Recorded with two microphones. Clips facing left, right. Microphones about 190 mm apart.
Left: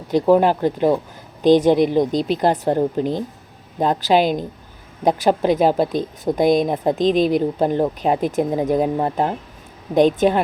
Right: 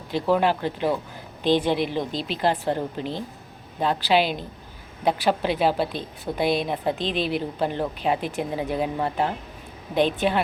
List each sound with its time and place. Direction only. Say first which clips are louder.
0.1 s speech: left 7 dB; 45° left (ahead or behind)